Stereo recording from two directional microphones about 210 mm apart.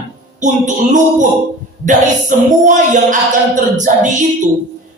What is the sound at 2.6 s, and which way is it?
Child singing, 35° right (ahead or behind).